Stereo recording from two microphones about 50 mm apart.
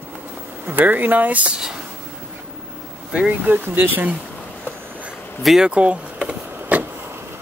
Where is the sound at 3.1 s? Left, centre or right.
Right.